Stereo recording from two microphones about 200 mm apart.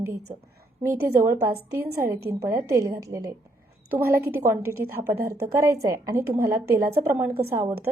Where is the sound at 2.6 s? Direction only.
15° right (ahead or behind).